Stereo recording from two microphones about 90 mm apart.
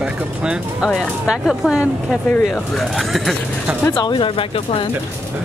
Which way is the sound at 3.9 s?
60° left (ahead or behind).